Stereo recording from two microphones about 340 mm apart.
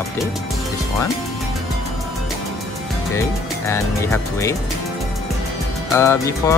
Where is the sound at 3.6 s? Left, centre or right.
Centre.